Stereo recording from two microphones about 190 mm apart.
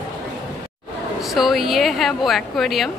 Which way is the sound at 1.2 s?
Centre (ahead or behind).